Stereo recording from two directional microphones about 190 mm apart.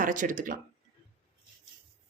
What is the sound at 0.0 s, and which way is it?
Speech, 45° right (ahead or behind).